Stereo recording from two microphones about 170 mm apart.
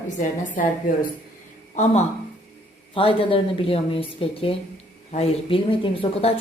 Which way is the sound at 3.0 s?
30° left (ahead or behind).